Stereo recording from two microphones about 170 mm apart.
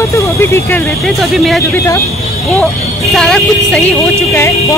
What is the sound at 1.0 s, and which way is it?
Speech, centre (ahead or behind).